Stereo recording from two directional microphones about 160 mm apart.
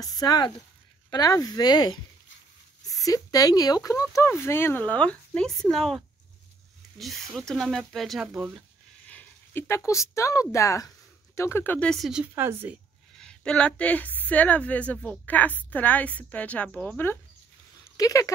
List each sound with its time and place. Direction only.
0.0 s speech: 25° left (ahead or behind); by 8.3 s centre (ahead or behind)
9.0 s a sound: 10° left (ahead or behind)
10.5 s speech: 20° left (ahead or behind); by 12.8 s 10° right (ahead or behind)
13.2 s a woman's voice: 5° left (ahead or behind); by 18.3 s 20° left (ahead or behind)